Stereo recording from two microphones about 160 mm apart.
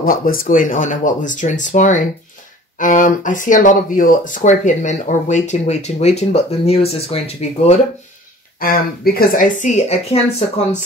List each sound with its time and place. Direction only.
0.0 s speech: 65° left (ahead or behind); by 7.8 s 40° left (ahead or behind)
8.5 s speech: 70° left (ahead or behind); by 10.1 s 45° left (ahead or behind)